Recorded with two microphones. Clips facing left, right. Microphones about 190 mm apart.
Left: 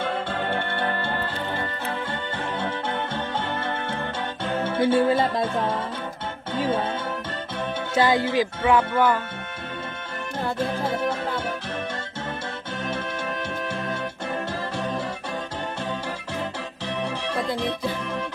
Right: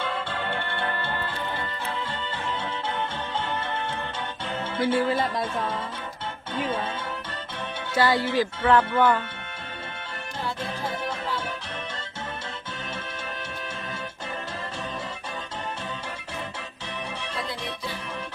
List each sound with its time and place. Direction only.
0.0 s music: 50° left (ahead or behind)
2.6 s music: 55° left (ahead or behind)
4.8 s speech: 25° left (ahead or behind)
7.9 s speech: 20° left (ahead or behind)
10.4 s music: 55° left (ahead or behind)
17.0 s music: 60° left (ahead or behind)